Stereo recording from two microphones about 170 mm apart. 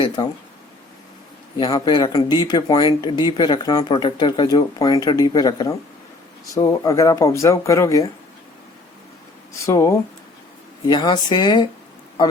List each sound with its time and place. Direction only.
0.2 s speech: 25° left (ahead or behind)
1.5 s speech: 30° left (ahead or behind)
9.6 s speech: 15° left (ahead or behind)